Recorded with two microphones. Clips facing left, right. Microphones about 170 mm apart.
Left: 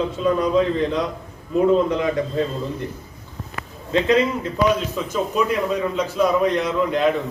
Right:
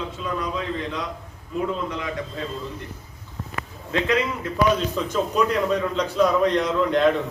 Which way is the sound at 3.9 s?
30° left (ahead or behind).